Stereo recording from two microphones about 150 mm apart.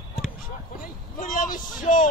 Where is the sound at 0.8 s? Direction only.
65° left (ahead or behind).